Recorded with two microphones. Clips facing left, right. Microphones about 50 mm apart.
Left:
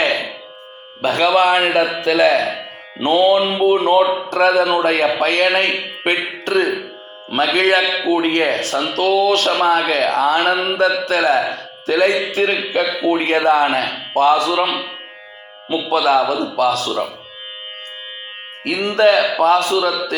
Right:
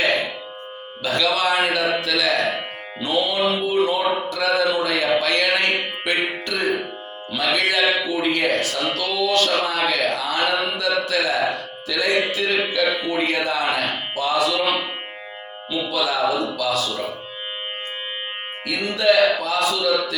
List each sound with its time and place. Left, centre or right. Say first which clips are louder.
1.0 s a man's voice: left 6 dB; left
13.1 s a man's voice: left 7 dB; left
15.7 s a man's voice: left 8 dB; left
18.6 s a man's voice: left 7 dB; left